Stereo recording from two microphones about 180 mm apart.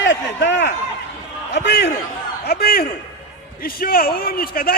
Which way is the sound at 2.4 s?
60° left (ahead or behind).